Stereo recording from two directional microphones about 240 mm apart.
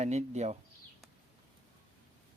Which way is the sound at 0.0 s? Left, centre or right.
Right.